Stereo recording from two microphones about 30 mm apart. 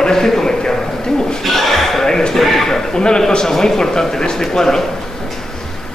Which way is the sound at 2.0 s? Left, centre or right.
Left.